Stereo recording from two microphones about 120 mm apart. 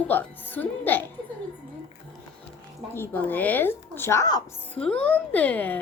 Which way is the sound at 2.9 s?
15° left (ahead or behind).